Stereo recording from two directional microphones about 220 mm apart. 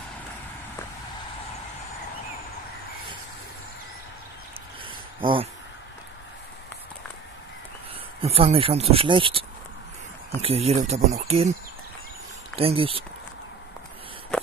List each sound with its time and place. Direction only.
4.8 s a sound: 25° right (ahead or behind)
8.2 s speech: 25° right (ahead or behind)
10.4 s speech: 30° right (ahead or behind)
12.5 s speech: 25° right (ahead or behind)